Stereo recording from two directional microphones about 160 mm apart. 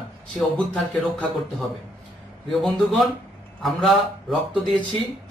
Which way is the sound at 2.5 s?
Centre (ahead or behind).